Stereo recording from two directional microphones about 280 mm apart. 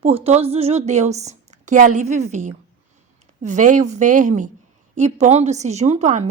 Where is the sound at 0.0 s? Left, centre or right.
Right.